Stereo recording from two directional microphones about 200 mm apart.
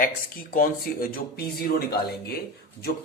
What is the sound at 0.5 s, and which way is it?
A man's voice, 45° left (ahead or behind).